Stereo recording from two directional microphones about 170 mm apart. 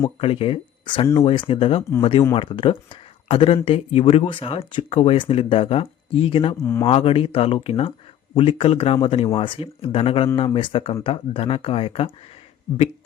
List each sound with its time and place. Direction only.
0.2 s speech: 35° left (ahead or behind)
6.6 s speech: 15° left (ahead or behind)
6.8 s speech: 35° left (ahead or behind)